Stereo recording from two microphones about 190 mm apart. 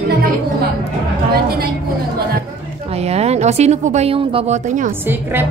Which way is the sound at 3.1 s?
35° right (ahead or behind).